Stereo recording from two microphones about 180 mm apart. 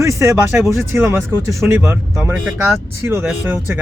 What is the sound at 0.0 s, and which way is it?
Speech, 15° right (ahead or behind).